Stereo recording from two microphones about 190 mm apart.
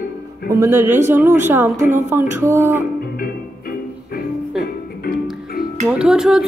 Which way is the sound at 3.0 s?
50° left (ahead or behind).